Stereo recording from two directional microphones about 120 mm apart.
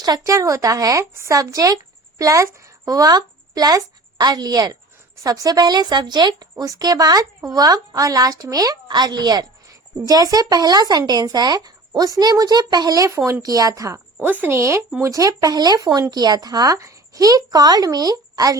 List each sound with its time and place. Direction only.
0.0 s speech: 30° right (ahead or behind)